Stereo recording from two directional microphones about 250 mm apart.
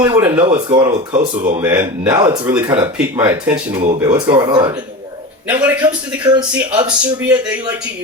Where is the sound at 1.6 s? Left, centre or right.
Centre.